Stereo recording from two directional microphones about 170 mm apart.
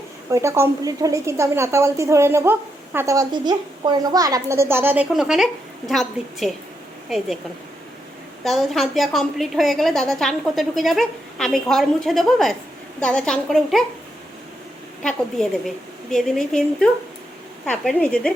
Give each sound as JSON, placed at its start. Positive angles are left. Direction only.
{"t": 0.3, "sound": "a woman's voice", "side_deg": -15}
{"t": 8.4, "sound": "a woman's voice", "side_deg": 0}
{"t": 15.0, "sound": "a woman's voice", "side_deg": 0}